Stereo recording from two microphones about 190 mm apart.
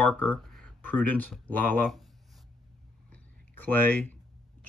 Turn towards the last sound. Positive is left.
turn(degrees=10)  # may be behind; listen again after turning